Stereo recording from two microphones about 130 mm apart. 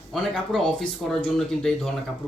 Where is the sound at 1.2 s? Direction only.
5° left (ahead or behind).